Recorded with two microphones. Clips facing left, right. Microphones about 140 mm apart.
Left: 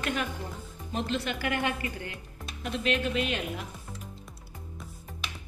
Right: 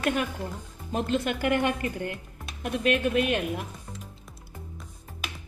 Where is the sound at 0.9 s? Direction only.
50° right (ahead or behind).